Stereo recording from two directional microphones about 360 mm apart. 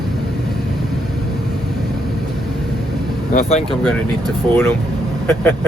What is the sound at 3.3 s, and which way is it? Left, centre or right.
Speech, centre.